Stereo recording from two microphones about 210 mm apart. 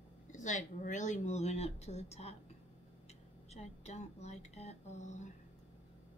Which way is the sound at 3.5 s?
30° left (ahead or behind).